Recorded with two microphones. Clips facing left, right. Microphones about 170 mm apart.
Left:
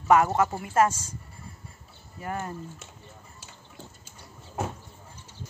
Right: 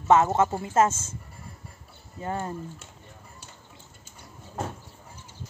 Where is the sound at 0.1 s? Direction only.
25° right (ahead or behind).